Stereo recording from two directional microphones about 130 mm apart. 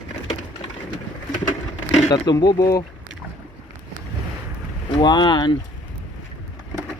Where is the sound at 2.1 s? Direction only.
30° left (ahead or behind).